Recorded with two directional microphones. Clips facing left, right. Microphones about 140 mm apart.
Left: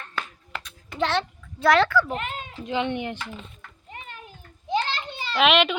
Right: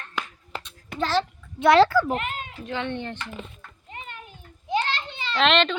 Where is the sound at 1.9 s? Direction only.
40° right (ahead or behind).